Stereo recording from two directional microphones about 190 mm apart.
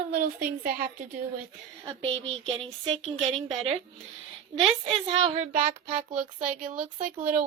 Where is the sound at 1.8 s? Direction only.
30° right (ahead or behind).